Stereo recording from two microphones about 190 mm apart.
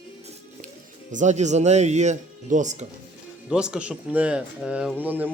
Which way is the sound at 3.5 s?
5° right (ahead or behind).